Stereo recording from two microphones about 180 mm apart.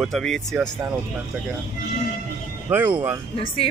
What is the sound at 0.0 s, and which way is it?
Speech, centre (ahead or behind).